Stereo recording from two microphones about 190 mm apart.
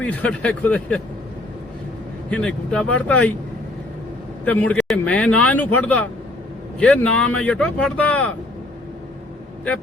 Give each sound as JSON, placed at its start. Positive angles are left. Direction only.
{"t": 0.0, "sound": "speech", "side_deg": 5}
{"t": 2.3, "sound": "speech", "side_deg": 5}
{"t": 4.4, "sound": "speech", "side_deg": 10}